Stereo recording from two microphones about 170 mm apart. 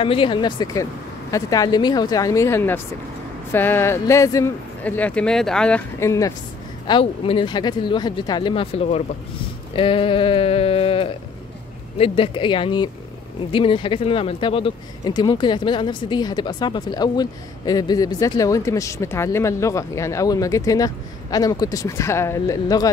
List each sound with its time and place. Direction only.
0.0 s speech: 30° left (ahead or behind); by 5.8 s 5° left (ahead or behind)
5.9 s speech: 20° left (ahead or behind)
6.9 s speech: 30° left (ahead or behind)
9.8 s a sound: 30° left (ahead or behind)
12.0 s speech: 30° left (ahead or behind)